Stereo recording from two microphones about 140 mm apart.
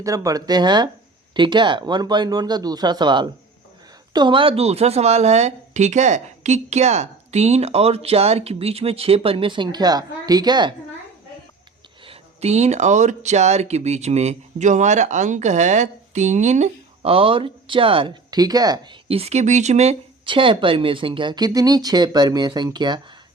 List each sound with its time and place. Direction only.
0.0 s speech: 25° right (ahead or behind)
12.0 s speech: 50° right (ahead or behind); by 18.8 s 30° right (ahead or behind)
19.0 s speech: 45° right (ahead or behind)
20.2 s speech: 35° right (ahead or behind)